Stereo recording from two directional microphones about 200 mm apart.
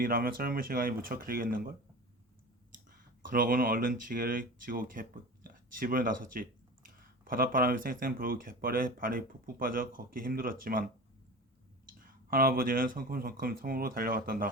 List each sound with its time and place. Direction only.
0.0 s speech: 45° right (ahead or behind)
3.2 s speech: 45° right (ahead or behind)
11.9 s speech: 45° right (ahead or behind)